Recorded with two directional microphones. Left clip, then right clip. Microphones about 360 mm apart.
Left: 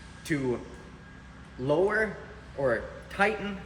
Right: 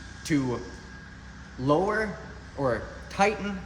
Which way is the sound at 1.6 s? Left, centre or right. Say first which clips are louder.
Right 1 dB; right.